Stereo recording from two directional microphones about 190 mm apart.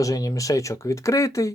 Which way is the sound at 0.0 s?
20° left (ahead or behind).